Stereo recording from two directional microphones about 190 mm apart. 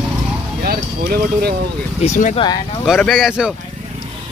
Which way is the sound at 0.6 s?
50° right (ahead or behind).